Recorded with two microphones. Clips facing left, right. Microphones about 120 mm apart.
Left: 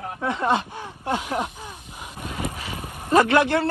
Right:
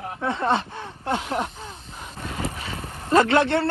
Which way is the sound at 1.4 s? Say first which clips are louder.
Even; 15° left (ahead or behind).